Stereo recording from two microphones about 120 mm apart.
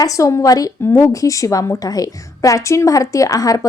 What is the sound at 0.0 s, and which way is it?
A woman's voice, 30° left (ahead or behind).